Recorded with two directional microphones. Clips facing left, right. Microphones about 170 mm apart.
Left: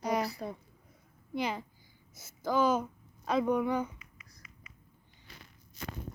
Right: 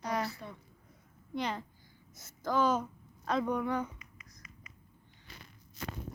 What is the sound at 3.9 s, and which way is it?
Music, 40° right (ahead or behind).